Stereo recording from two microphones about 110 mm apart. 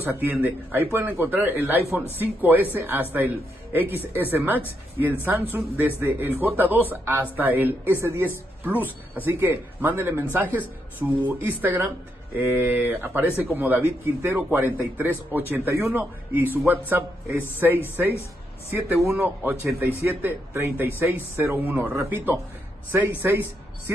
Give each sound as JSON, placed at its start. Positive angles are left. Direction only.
{"t": 0.2, "sound": "a man's voice", "side_deg": -20}